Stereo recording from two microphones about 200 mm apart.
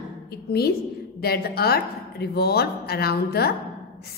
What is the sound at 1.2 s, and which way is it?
A woman's voice, 50° left (ahead or behind).